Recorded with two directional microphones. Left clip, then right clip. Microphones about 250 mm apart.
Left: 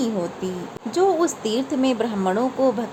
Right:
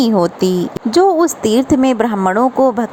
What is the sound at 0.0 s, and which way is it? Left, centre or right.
Speech, right.